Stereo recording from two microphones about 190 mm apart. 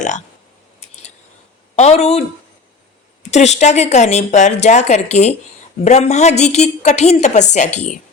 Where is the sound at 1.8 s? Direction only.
35° left (ahead or behind).